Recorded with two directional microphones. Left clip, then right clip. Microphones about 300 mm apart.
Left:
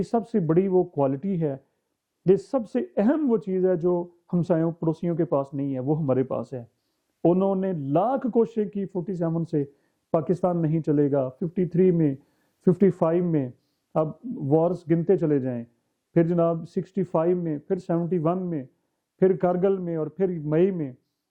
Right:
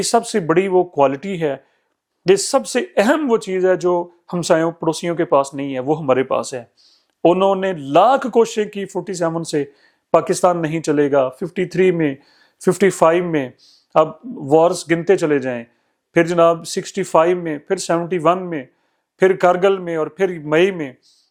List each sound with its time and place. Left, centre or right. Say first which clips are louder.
0.0 s speech: right 9 dB; centre
14.6 s speech: right 9 dB; centre